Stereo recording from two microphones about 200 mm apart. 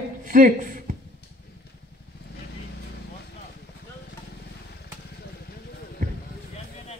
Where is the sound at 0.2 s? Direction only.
40° right (ahead or behind).